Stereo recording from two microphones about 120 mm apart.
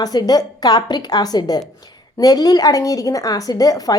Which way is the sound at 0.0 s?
35° left (ahead or behind).